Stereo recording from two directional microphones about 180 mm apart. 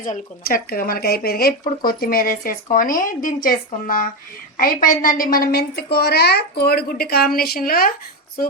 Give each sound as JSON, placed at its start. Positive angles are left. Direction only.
{"t": 0.0, "sound": "a woman's voice", "side_deg": 50}